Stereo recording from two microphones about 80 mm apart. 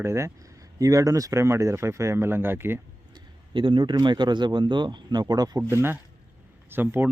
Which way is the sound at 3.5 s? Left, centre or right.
Right.